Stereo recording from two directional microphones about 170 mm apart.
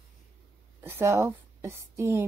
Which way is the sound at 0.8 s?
15° right (ahead or behind).